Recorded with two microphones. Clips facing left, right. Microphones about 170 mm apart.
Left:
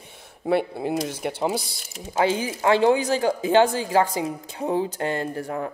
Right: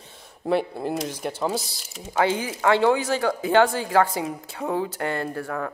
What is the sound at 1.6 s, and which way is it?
Speech, 60° left (ahead or behind).